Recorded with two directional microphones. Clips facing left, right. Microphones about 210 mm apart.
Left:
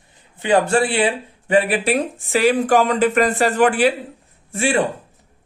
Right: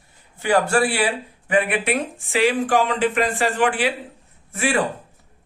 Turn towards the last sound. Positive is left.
turn(degrees=30)  # may be behind; listen again after turning